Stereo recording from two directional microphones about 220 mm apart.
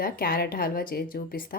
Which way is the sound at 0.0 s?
40° left (ahead or behind).